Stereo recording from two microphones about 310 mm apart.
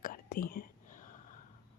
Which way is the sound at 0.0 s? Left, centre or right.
Left.